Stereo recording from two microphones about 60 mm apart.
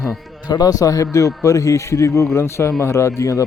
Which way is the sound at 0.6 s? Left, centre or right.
Left.